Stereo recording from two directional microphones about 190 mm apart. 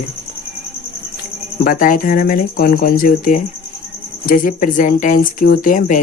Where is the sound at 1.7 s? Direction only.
45° left (ahead or behind).